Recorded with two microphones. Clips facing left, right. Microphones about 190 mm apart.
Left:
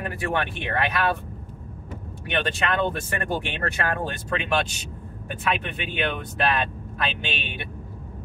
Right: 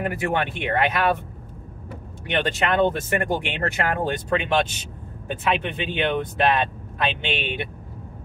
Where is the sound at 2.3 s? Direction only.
25° right (ahead or behind).